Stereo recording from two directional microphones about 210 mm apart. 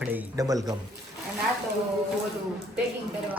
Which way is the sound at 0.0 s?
10° right (ahead or behind).